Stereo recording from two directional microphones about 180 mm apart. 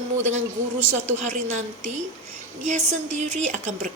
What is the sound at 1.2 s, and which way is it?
A woman's voice, 40° right (ahead or behind).